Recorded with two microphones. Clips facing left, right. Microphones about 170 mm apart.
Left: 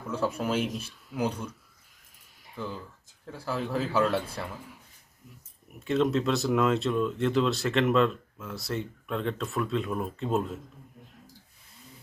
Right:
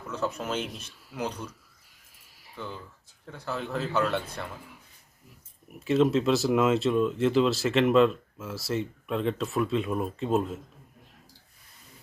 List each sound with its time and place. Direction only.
0.1 s speech: 10° left (ahead or behind)
2.6 s speech: 10° left (ahead or behind)
5.8 s speech: centre (ahead or behind)